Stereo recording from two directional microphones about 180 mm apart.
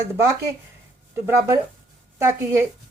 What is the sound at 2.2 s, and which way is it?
Speech, 15° right (ahead or behind).